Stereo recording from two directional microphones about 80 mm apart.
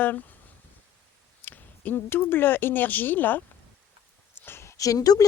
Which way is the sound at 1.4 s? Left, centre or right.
Left.